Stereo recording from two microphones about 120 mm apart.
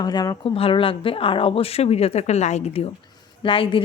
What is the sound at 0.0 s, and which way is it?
Speech, 35° left (ahead or behind).